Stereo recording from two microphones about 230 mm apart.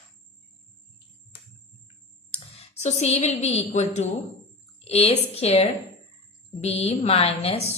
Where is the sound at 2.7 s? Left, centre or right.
Left.